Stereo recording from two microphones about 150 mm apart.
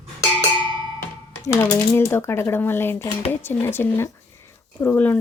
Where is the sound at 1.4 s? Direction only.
20° left (ahead or behind).